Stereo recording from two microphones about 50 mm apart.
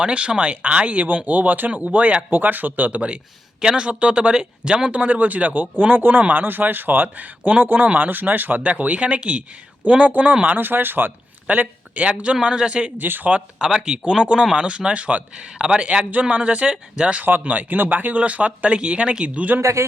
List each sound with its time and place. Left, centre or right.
0.0 s speech: right
2.3 s speech: right; by 12.9 s centre
13.0 s speech: right
13.3 s speech: centre; by 19.6 s right